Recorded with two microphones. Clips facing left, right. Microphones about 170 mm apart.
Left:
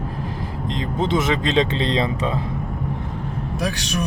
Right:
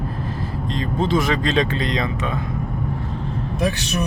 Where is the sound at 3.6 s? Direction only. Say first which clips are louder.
Right 3 dB; centre (ahead or behind).